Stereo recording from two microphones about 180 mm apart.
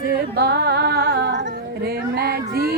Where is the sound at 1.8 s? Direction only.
60° right (ahead or behind).